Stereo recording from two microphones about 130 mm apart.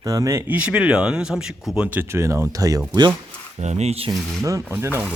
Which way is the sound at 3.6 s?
60° right (ahead or behind).